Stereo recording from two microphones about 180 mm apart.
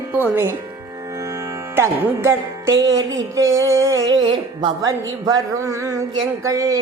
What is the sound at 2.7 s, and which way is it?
Music, 90° right.